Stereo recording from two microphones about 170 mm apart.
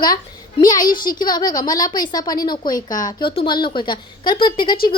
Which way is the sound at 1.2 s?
25° left (ahead or behind).